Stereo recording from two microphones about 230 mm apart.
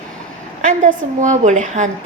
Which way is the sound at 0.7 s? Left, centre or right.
Right.